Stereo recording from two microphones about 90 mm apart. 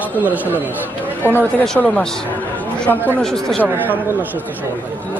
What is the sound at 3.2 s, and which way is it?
Speech, 5° left (ahead or behind).